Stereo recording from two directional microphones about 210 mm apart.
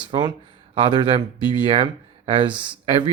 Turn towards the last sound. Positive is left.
turn(degrees=-25)  # may be behind; listen again after turning